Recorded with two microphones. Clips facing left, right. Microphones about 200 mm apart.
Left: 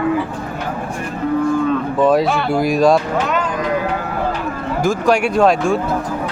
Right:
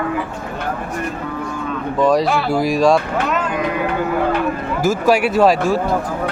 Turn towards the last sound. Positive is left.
turn(degrees=-5)  # may be behind; listen again after turning